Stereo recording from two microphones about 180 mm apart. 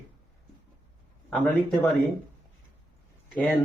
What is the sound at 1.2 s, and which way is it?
Speech, 10° left (ahead or behind).